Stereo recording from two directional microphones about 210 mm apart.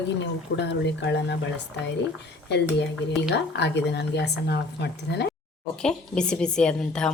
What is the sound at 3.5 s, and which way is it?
Speech, 55° left (ahead or behind).